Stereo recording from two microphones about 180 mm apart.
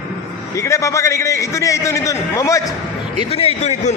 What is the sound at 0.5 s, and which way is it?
A man's voice, 15° left (ahead or behind).